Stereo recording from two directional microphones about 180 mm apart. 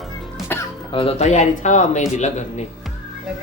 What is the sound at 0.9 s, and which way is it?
Speech, 30° left (ahead or behind).